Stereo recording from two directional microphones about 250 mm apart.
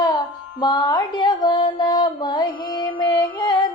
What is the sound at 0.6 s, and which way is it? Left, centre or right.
Music, centre.